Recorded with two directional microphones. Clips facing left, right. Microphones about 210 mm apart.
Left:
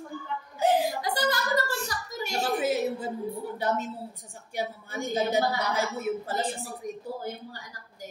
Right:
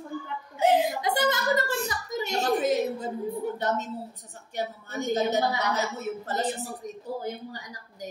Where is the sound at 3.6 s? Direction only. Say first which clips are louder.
Even; 10° left (ahead or behind).